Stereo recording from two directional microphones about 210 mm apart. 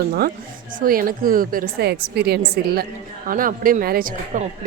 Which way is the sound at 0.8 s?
40° right (ahead or behind).